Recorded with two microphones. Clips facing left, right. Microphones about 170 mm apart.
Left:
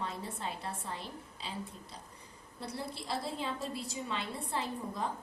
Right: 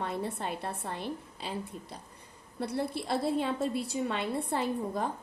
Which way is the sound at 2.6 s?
60° right (ahead or behind).